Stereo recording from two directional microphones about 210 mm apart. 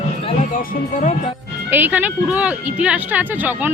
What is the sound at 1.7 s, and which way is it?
Speech, 10° right (ahead or behind).